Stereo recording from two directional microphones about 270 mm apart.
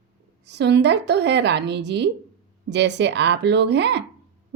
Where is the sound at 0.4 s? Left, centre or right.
Right.